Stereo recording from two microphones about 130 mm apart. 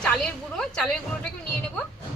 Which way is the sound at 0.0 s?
5° left (ahead or behind).